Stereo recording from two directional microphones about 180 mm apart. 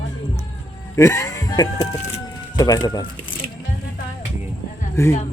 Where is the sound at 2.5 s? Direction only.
20° left (ahead or behind).